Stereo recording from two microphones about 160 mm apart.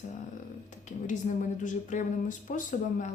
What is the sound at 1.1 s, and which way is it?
A woman's voice, 50° left (ahead or behind).